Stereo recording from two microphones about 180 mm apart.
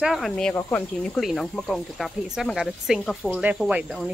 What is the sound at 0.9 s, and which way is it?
Speech, 5° left (ahead or behind).